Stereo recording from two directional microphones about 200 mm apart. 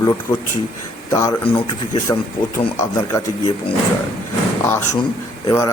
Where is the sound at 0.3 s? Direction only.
25° left (ahead or behind).